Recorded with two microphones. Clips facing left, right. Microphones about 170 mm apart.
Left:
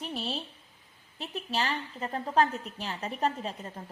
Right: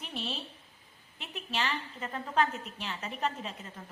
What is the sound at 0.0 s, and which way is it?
A woman's voice, 40° left (ahead or behind).